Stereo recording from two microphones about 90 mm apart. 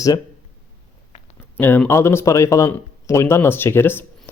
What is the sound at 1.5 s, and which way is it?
Speech, 20° left (ahead or behind).